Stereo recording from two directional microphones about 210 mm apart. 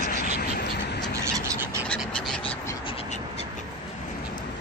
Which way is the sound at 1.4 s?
15° right (ahead or behind).